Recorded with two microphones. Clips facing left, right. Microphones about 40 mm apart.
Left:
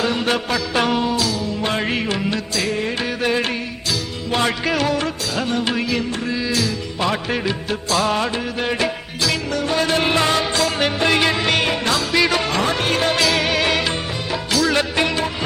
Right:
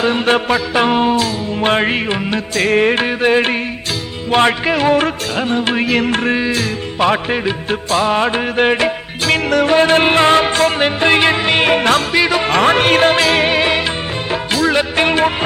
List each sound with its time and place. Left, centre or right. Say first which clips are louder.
0.0 s music: right 6 dB; right
1.9 s music: right 4 dB; right
2.6 s music: right 12 dB; right
4.6 s music: right 4 dB; right
4.9 s music: right 7 dB; right
5.9 s music: right 7 dB; right
6.4 s music: right 3 dB; right
7.3 s music: right 4 dB; right
7.7 s music: right 4 dB; right
11.6 s music: right 7 dB; right
12.1 s music: right 3 dB; right
12.5 s music: right 8 dB; right
14.9 s music: right 6 dB; right